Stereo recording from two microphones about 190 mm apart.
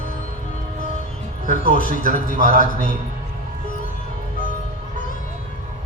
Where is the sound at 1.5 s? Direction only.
45° left (ahead or behind).